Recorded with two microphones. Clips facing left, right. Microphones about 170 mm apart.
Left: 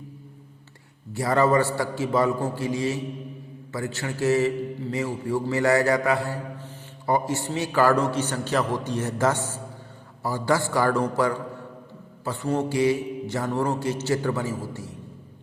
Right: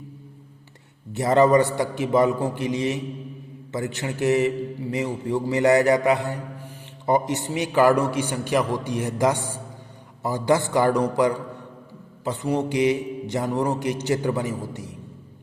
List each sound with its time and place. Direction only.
1.1 s a man's voice: 20° right (ahead or behind)